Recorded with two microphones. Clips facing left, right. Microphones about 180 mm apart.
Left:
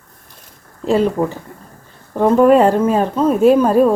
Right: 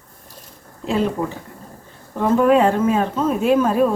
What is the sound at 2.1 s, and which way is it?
A woman's voice, 40° left (ahead or behind).